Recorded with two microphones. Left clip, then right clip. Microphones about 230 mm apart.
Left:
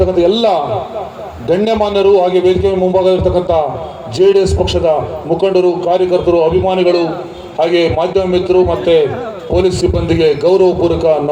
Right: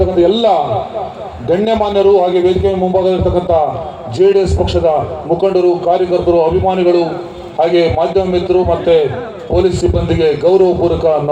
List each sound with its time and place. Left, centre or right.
0.2 s a man's voice: left